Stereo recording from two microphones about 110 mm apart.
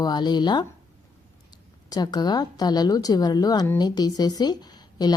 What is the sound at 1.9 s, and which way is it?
A woman's voice, 40° left (ahead or behind).